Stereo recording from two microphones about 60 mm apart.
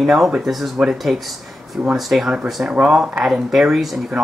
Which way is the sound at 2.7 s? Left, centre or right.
Centre.